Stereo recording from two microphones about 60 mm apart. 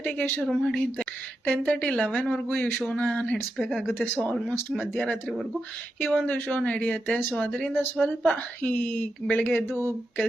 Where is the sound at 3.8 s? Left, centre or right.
Left.